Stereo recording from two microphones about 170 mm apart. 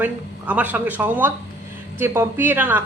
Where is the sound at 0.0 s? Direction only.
10° right (ahead or behind).